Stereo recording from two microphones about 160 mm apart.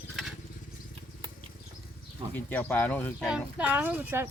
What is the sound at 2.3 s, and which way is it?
Speech, 10° left (ahead or behind).